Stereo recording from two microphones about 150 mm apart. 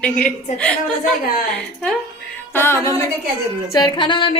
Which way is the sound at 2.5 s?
15° left (ahead or behind).